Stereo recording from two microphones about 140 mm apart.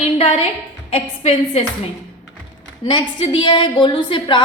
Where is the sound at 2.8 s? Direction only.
35° left (ahead or behind).